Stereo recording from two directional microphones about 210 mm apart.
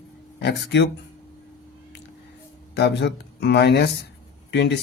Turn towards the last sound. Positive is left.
turn(degrees=50)  # may be behind; listen again after turning